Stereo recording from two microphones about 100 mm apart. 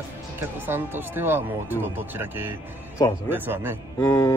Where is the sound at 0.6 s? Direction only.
20° right (ahead or behind).